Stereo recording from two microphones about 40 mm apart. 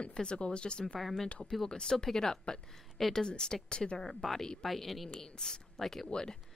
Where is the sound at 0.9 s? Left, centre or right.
Centre; by 4.1 s left.